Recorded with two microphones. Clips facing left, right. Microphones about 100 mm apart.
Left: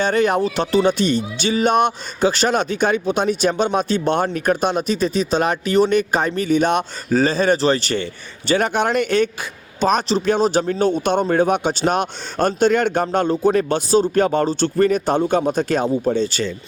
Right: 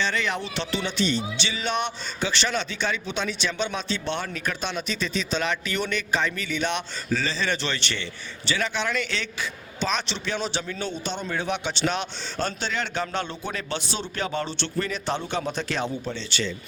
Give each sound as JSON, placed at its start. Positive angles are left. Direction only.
{"t": 0.0, "sound": "a man's voice", "side_deg": 45}